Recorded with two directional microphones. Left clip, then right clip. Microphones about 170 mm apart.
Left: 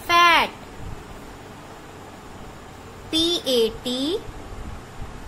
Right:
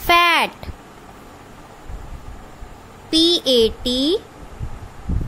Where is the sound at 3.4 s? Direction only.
50° right (ahead or behind).